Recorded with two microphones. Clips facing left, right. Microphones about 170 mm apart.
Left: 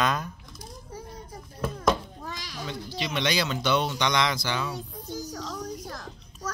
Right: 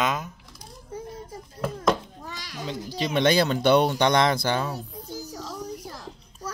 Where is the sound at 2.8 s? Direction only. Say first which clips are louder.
Right 7 dB; 40° right (ahead or behind).